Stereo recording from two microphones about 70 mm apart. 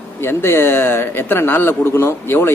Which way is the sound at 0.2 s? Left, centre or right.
Left.